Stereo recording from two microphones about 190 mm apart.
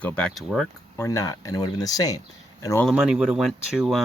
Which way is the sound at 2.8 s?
5° right (ahead or behind).